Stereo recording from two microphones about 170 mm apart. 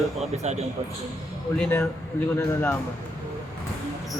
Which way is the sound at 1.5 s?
10° left (ahead or behind).